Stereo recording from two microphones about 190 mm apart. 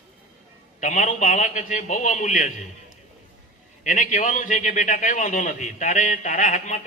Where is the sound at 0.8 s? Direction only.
40° left (ahead or behind).